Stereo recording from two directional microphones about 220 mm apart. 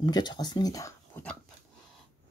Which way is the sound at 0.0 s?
20° left (ahead or behind).